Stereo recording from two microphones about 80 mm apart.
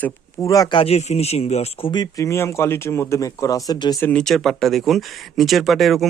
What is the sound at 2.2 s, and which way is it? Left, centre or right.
Speech, left.